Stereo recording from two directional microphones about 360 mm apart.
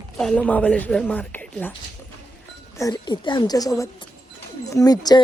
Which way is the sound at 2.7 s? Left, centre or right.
Centre.